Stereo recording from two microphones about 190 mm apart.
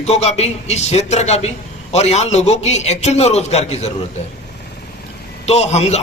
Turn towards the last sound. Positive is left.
turn(degrees=35)  # may be behind; listen again after turning